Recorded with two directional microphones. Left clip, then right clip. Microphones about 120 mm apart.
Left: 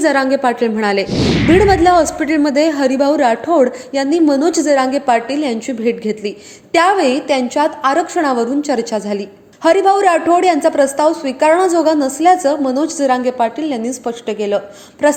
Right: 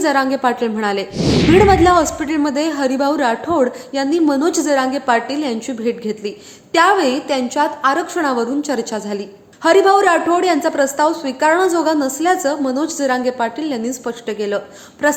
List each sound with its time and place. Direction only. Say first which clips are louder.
0.0 s a woman's voice: left 2 dB; 20° left (ahead or behind)